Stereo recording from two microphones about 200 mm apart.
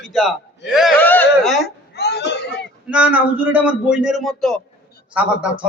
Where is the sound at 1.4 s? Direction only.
Centre (ahead or behind).